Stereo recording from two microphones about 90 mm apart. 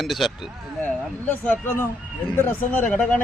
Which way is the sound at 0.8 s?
20° left (ahead or behind).